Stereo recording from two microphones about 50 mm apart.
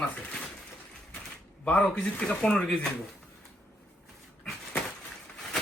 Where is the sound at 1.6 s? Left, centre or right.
Left.